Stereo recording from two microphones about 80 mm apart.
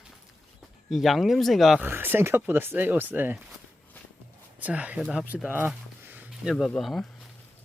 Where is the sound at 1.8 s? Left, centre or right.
Right.